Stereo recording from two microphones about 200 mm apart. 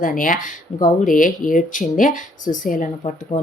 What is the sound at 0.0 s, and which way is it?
Speech, 45° left (ahead or behind).